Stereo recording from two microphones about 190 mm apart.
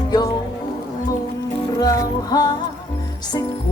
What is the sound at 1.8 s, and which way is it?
Music, 20° left (ahead or behind).